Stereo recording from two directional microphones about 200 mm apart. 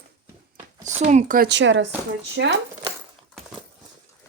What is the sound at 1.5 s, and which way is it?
Speech, 65° right (ahead or behind).